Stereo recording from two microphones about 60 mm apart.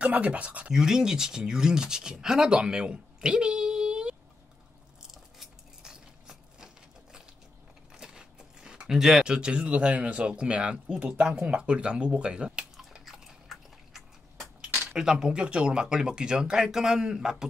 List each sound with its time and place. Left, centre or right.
0.0 s speech: right
0.7 s speech: centre
5.1 s a sound: centre
7.9 s speech: centre
13.0 s biting: centre
14.9 s speech: centre